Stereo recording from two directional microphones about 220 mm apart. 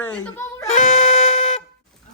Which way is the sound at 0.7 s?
30° left (ahead or behind).